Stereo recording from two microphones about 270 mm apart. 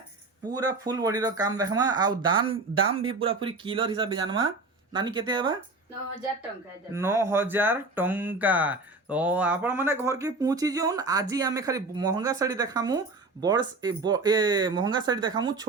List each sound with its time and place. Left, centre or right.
0.9 s speech: centre
6.9 s speech: centre